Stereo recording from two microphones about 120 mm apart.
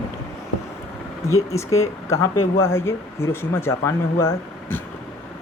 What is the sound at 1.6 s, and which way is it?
Speech, 25° left (ahead or behind).